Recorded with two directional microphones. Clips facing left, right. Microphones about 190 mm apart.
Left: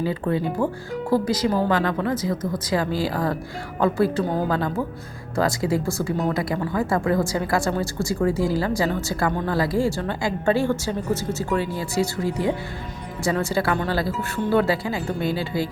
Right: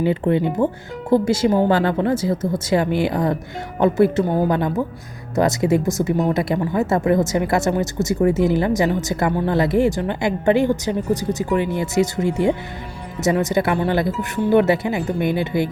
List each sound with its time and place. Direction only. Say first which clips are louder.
0.0 s a woman's voice: right 5 dB; 25° right (ahead or behind)